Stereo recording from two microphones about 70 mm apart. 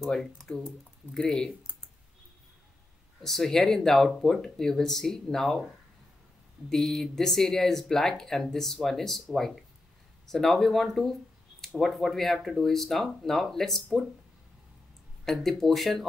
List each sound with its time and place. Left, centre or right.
0.0 s speech: centre
3.2 s speech: centre
6.7 s speech: centre
15.2 s speech: centre